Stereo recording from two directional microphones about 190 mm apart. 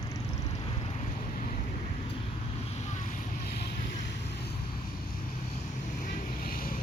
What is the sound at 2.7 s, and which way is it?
Vehicle, 35° left (ahead or behind).